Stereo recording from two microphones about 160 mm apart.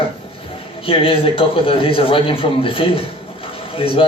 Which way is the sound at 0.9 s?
35° left (ahead or behind).